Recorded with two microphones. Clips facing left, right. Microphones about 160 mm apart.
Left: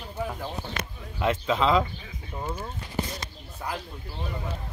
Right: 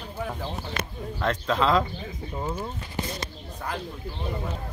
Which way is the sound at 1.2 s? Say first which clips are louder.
Left 1 dB; 5° left (ahead or behind).